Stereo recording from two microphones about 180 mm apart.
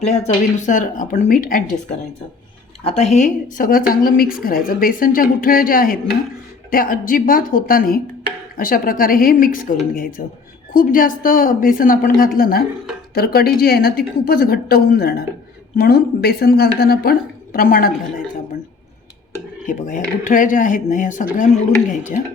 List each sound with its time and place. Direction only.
0.0 s speech: 40° left (ahead or behind)
2.8 s a woman's voice: 35° left (ahead or behind); by 17.9 s 50° left (ahead or behind)
19.6 s speech: 45° left (ahead or behind)